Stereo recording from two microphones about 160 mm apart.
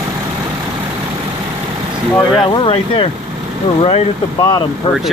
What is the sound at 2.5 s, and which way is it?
Speech, 30° left (ahead or behind).